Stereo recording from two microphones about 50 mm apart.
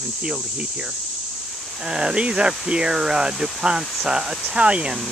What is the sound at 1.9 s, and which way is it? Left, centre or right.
Speech, centre.